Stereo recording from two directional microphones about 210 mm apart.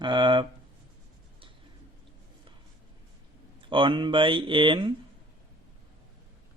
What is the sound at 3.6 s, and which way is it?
Speech, 25° right (ahead or behind).